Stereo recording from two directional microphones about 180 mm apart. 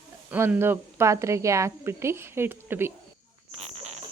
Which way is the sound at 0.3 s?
10° right (ahead or behind).